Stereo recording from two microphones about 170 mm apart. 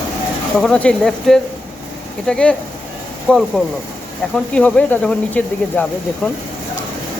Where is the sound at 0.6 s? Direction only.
5° left (ahead or behind).